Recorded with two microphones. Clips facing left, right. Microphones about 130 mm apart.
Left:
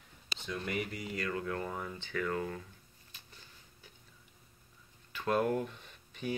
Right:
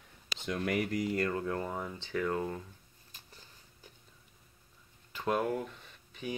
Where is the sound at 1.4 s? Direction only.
25° right (ahead or behind).